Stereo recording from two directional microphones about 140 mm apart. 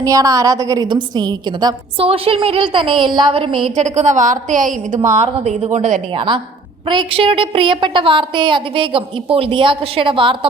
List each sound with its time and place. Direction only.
0.0 s a woman's voice: 25° right (ahead or behind)
2.0 s a woman's voice: 45° right (ahead or behind)
3.8 s a woman's voice: 60° right (ahead or behind)
5.4 s a woman's voice: 50° right (ahead or behind)
6.1 s a woman's voice: 35° right (ahead or behind)